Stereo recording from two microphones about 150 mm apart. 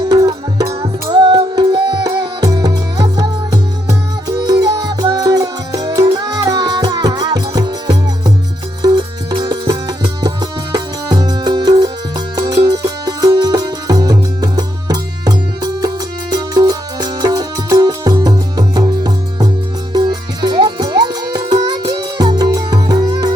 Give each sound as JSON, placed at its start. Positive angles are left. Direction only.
{"t": 0.0, "sound": "music", "side_deg": -25}